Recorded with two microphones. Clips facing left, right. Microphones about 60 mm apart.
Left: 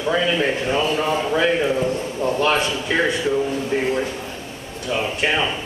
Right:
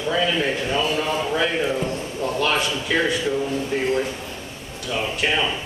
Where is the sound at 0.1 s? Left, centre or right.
Left.